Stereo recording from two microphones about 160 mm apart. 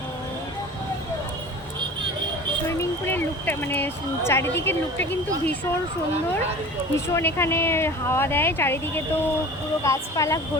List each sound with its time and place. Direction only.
2.6 s speech: 15° left (ahead or behind)
6.9 s speech: 15° left (ahead or behind)
9.8 s speech: 20° left (ahead or behind)